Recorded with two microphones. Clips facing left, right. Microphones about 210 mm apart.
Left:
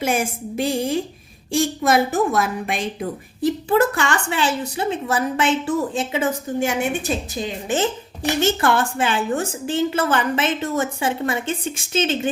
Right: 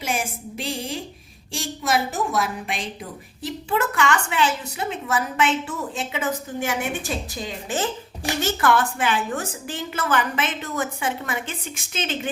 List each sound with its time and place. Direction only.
0.0 s a woman's voice: 50° left (ahead or behind)
3.7 s a woman's voice: 35° left (ahead or behind)